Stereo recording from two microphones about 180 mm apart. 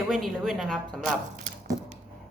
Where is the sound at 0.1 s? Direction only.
Centre (ahead or behind).